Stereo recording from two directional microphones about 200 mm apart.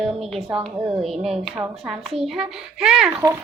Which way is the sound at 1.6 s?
10° right (ahead or behind).